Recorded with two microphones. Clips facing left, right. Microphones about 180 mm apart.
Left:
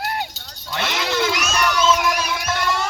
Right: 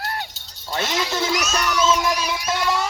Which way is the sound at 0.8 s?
65° left (ahead or behind).